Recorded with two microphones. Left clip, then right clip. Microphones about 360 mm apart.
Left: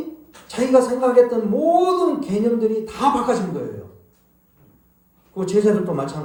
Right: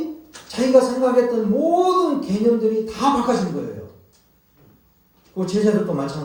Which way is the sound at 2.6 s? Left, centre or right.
Left.